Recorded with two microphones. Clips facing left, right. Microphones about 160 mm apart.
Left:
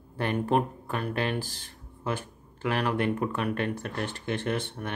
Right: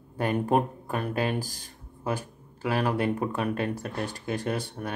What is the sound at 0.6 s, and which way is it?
Speech, 20° right (ahead or behind).